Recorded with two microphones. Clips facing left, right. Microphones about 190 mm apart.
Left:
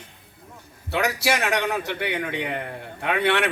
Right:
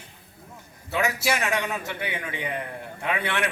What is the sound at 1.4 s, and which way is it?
A man's voice, 65° left (ahead or behind).